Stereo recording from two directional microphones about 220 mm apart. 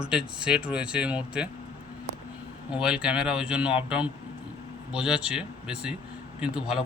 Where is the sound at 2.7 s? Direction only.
5° right (ahead or behind).